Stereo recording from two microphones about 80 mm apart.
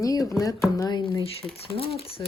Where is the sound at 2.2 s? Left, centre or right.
Left.